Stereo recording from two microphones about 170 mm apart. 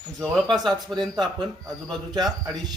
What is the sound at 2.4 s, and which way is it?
Speech, 25° right (ahead or behind).